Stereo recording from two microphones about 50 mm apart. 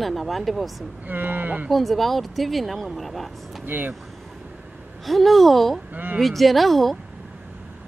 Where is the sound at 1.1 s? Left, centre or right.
Right.